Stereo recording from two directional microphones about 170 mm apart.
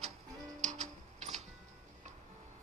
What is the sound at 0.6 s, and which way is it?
Music, 45° right (ahead or behind).